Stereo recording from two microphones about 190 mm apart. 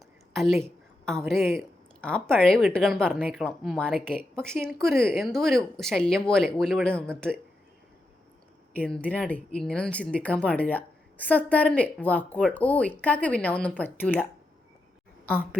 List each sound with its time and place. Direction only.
0.6 s a sound: 5° left (ahead or behind)
1.4 s speech: 10° right (ahead or behind)
2.0 s a woman's voice: 5° left (ahead or behind)
8.7 s speech: 5° left (ahead or behind)